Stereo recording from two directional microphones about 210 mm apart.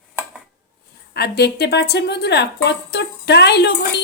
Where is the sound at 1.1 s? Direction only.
50° left (ahead or behind).